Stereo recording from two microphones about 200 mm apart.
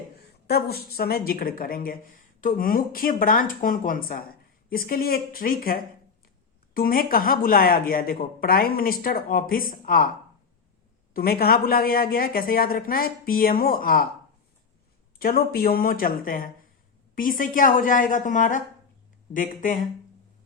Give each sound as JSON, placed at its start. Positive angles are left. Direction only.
{"t": 0.2, "sound": "speech", "side_deg": 50}
{"t": 11.1, "sound": "speech", "side_deg": 50}
{"t": 15.2, "sound": "speech", "side_deg": 50}
{"t": 19.6, "sound": "speech", "side_deg": 40}